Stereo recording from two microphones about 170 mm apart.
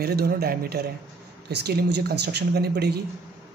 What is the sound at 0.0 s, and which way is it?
Speech, 65° right (ahead or behind).